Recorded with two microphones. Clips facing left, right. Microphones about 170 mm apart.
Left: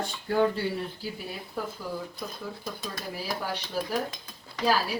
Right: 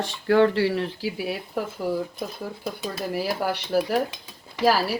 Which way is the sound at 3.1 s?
70° right (ahead or behind).